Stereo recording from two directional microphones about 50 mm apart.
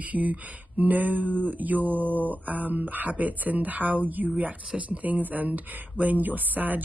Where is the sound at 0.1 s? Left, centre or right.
Right.